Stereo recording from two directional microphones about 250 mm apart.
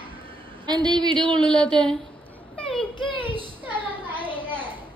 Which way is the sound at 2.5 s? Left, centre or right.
Centre.